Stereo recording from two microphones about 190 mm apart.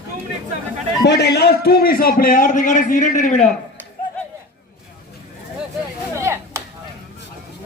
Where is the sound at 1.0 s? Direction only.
60° left (ahead or behind); by 3.4 s 40° left (ahead or behind).